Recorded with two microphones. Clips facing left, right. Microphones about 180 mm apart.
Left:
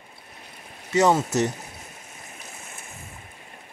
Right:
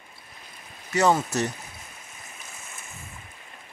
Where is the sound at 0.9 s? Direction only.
25° left (ahead or behind).